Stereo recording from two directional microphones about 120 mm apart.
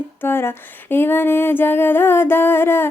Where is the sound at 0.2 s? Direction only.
20° left (ahead or behind).